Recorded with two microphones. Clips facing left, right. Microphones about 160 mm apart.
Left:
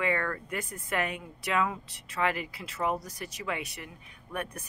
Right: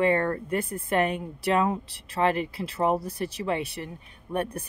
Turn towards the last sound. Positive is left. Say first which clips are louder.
# right 7 dB
turn(degrees=-30)  # may be behind; listen again after turning